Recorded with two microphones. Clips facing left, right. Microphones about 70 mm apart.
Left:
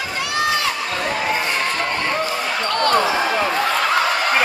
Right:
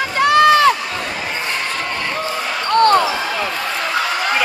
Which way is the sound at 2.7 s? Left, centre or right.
Right.